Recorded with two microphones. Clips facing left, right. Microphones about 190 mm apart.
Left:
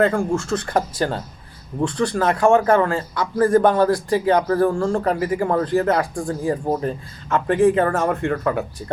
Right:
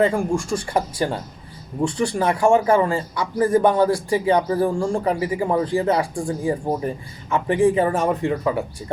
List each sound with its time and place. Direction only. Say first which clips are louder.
0.0 s speech: left 1 dB; 15° right (ahead or behind)